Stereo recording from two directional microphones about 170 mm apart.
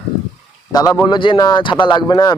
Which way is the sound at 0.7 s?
20° left (ahead or behind).